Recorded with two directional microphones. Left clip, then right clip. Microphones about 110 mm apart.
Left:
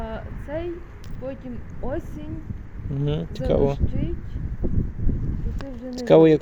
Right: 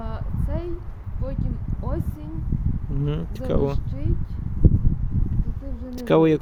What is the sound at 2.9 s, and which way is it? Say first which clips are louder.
Speech: left 3 dB; 35° right (ahead or behind).